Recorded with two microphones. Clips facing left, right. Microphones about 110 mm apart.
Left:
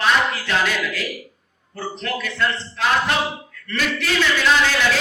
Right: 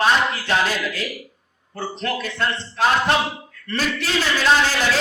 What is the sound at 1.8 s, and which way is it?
A man's voice, 30° right (ahead or behind).